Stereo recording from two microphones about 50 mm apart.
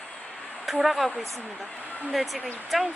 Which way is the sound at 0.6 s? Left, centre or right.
Centre.